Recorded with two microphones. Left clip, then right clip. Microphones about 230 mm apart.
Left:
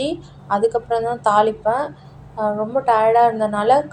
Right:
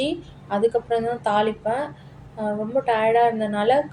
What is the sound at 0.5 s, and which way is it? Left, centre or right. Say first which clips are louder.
A woman's voice: left 3 dB; centre.